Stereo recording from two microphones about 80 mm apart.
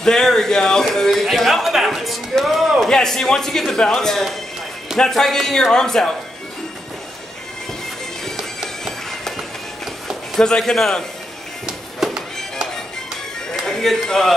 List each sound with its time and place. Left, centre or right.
0.0 s a man's voice: centre
8.4 s music: centre
10.0 s a man's voice: centre
11.6 s music: centre
13.5 s a sound: centre